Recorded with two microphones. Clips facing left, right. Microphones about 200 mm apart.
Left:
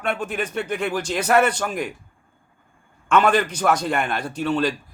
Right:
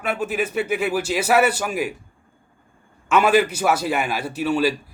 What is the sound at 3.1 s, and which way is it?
A man's voice, 5° right (ahead or behind).